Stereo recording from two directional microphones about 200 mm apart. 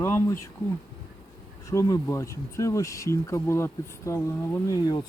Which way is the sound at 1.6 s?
15° left (ahead or behind).